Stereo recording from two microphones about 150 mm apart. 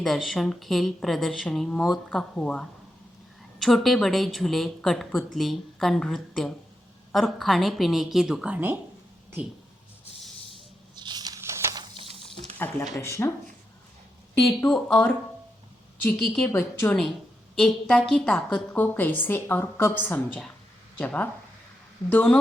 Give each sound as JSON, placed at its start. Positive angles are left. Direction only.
{"t": 0.0, "sound": "a woman's voice", "side_deg": 0}
{"t": 10.2, "sound": "a sound", "side_deg": 0}
{"t": 10.9, "sound": "a sound", "side_deg": -30}
{"t": 12.6, "sound": "a woman's voice", "side_deg": 15}
{"t": 14.7, "sound": "a woman's voice", "side_deg": 10}
{"t": 16.1, "sound": "a woman's voice", "side_deg": 0}
{"t": 16.5, "sound": "a woman's voice", "side_deg": 15}
{"t": 17.5, "sound": "a woman's voice", "side_deg": 5}